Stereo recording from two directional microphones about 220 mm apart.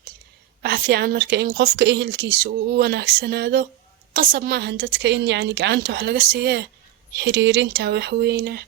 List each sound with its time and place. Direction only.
0.6 s a woman's voice: 45° right (ahead or behind)